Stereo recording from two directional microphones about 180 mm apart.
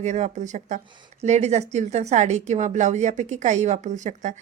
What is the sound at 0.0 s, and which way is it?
Speech, 40° right (ahead or behind).